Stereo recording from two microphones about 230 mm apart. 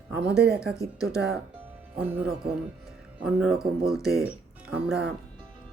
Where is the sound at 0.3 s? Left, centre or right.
Right.